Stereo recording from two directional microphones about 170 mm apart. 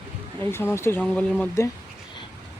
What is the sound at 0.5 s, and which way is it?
Speech, 15° left (ahead or behind).